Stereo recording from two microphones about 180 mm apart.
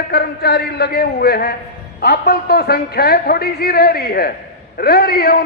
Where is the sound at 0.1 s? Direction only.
60° left (ahead or behind).